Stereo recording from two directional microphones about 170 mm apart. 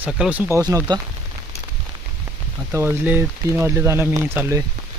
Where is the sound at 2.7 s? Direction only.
15° right (ahead or behind).